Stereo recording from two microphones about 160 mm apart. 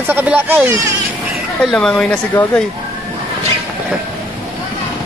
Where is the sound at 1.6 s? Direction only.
5° left (ahead or behind).